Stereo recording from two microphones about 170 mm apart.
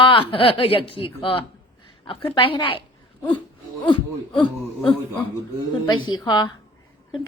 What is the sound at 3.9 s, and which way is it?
Speech, 30° left (ahead or behind).